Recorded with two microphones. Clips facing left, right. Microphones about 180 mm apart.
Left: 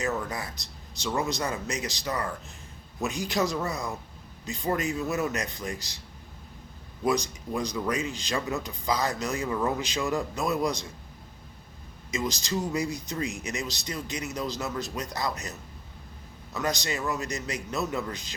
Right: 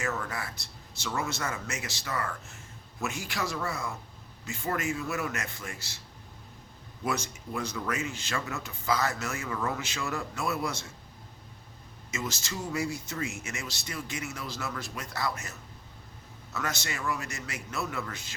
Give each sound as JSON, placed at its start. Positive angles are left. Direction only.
{"t": 0.0, "sound": "a man's voice", "side_deg": 20}
{"t": 7.0, "sound": "a man's voice", "side_deg": 15}
{"t": 12.1, "sound": "speech", "side_deg": 15}